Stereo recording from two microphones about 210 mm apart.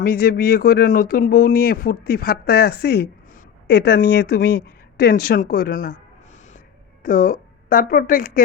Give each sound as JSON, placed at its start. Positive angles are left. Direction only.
{"t": 0.0, "sound": "speech", "side_deg": 45}
{"t": 7.0, "sound": "a woman's voice", "side_deg": 40}